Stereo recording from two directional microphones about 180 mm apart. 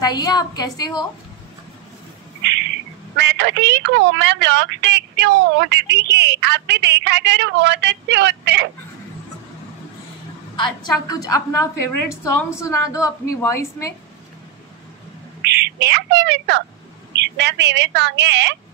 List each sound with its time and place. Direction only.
0.0 s a woman's voice: 20° left (ahead or behind)
3.2 s a woman's voice: 75° right (ahead or behind)
10.5 s a woman's voice: 25° left (ahead or behind)
15.4 s a woman's voice: 65° right (ahead or behind)